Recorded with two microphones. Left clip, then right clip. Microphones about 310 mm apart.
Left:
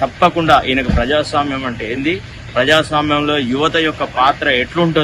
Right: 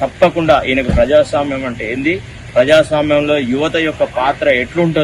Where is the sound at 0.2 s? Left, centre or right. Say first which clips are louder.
Right 1 dB; centre.